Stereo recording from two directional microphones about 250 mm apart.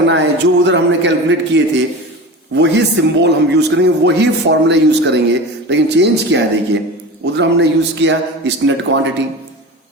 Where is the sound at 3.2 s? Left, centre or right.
Right.